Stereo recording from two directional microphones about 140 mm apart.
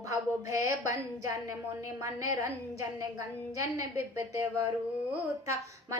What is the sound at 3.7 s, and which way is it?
A woman's voice, 25° right (ahead or behind).